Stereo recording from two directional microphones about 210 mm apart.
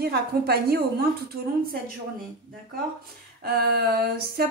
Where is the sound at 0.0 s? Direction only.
50° right (ahead or behind).